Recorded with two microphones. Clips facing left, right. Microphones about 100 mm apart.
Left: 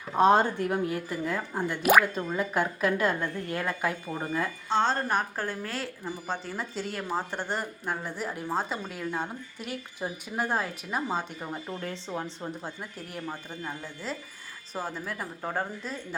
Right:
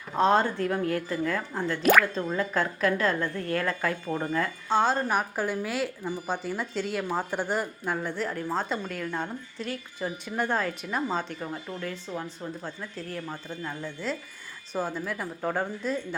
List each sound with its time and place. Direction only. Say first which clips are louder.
0.2 s speech: left 1 dB; 15° left (ahead or behind)
4.7 s a woman's voice: right 2 dB; 5° right (ahead or behind); by 11.4 s 10° left (ahead or behind)
11.8 s speech: even; 30° left (ahead or behind)
14.0 s a woman's voice: right 2 dB; 5° left (ahead or behind)